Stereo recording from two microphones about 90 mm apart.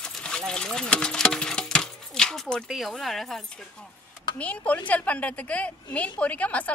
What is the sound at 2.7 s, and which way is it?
Speech, centre (ahead or behind).